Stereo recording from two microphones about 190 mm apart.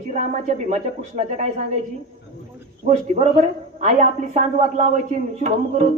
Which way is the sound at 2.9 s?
35° right (ahead or behind).